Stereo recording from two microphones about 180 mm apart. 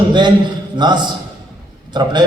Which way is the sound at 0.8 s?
25° right (ahead or behind).